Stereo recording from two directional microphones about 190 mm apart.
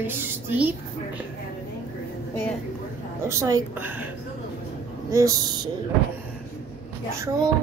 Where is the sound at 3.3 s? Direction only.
15° right (ahead or behind).